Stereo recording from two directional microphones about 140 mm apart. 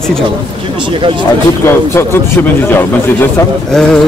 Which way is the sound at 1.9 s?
15° left (ahead or behind).